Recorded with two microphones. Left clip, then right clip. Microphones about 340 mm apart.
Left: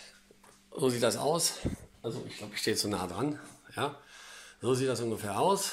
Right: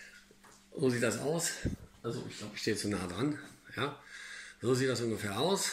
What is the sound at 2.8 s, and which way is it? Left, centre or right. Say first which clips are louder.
Speech: left 3 dB; left.